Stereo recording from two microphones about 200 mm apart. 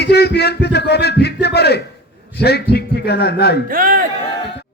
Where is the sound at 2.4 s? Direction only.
55° left (ahead or behind).